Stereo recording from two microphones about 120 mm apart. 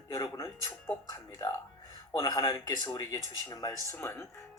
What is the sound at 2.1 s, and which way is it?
Speech, 30° left (ahead or behind).